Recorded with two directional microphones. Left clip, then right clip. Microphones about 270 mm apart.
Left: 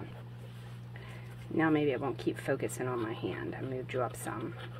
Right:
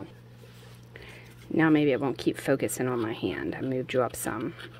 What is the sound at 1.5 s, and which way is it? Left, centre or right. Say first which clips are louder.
Speech: right 6 dB; right.